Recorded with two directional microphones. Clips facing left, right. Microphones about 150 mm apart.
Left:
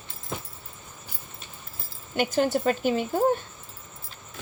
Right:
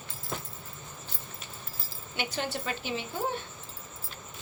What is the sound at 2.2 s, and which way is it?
A woman's voice, 45° left (ahead or behind).